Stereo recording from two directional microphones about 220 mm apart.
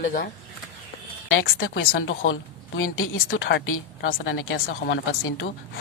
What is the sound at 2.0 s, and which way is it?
A woman's voice, 60° left (ahead or behind).